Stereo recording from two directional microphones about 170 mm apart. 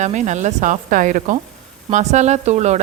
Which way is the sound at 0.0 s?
45° right (ahead or behind).